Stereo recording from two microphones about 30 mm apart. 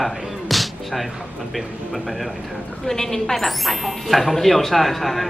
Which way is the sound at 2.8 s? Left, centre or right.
Centre.